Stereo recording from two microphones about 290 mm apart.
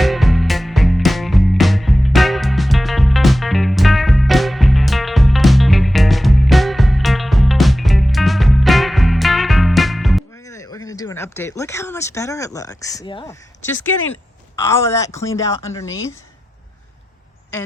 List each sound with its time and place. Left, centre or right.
0.0 s music: centre
10.4 s speech: centre
13.7 s speech: left
14.6 s speech: centre